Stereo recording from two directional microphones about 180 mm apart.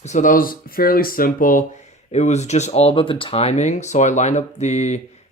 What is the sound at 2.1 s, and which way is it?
Speech, 40° left (ahead or behind).